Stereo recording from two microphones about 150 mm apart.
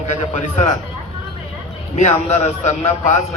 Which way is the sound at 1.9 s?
50° left (ahead or behind).